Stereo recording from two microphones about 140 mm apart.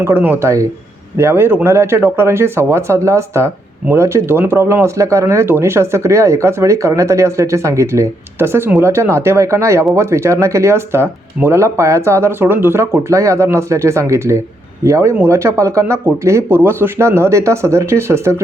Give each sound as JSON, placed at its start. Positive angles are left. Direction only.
{"t": 0.0, "sound": "speech", "side_deg": -15}